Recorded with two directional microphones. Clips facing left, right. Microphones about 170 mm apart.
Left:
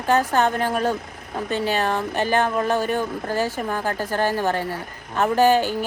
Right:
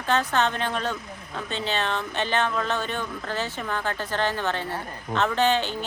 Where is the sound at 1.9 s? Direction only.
45° left (ahead or behind).